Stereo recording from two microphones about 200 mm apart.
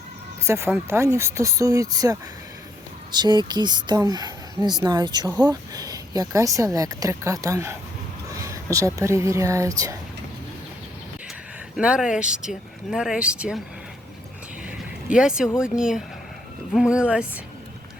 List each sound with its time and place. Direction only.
0.4 s speech: 10° right (ahead or behind)
11.8 s speech: 5° right (ahead or behind)
14.7 s a sound: 5° right (ahead or behind)
15.5 s speech: 5° right (ahead or behind)